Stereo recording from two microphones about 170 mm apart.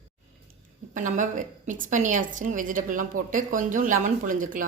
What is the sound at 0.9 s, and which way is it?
A woman's voice, 50° right (ahead or behind).